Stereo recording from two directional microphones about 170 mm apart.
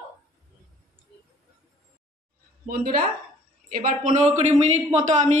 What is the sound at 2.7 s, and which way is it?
A woman's voice, 60° right (ahead or behind).